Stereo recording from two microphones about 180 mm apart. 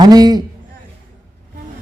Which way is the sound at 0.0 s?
20° right (ahead or behind).